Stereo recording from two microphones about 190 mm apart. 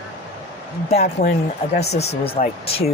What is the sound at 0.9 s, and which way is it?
Speech, 35° left (ahead or behind).